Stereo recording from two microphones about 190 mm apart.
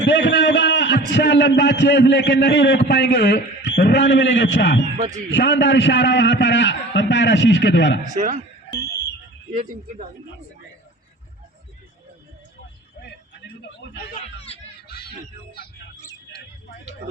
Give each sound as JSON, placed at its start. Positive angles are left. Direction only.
{"t": 0.0, "sound": "a sound", "side_deg": 70}
{"t": 1.1, "sound": "a man's voice", "side_deg": 65}
{"t": 4.9, "sound": "a man's voice", "side_deg": -40}
{"t": 5.3, "sound": "a man's voice", "side_deg": 70}
{"t": 8.1, "sound": "speech", "side_deg": -40}
{"t": 9.5, "sound": "speech", "side_deg": -45}
{"t": 14.8, "sound": "a sound", "side_deg": 55}